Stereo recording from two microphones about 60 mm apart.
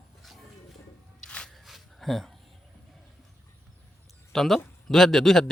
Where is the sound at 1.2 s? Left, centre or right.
Centre.